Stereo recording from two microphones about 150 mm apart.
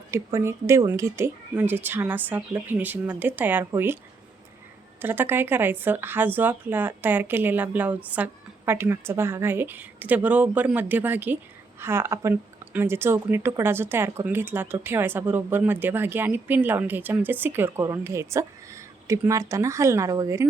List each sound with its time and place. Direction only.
0.1 s a woman's voice: 20° right (ahead or behind)
4.9 s a woman's voice: 15° right (ahead or behind)